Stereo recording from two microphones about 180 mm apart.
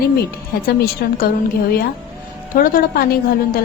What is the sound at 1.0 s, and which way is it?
Speech, 60° left (ahead or behind).